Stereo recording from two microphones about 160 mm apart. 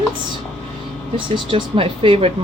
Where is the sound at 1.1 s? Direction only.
35° right (ahead or behind).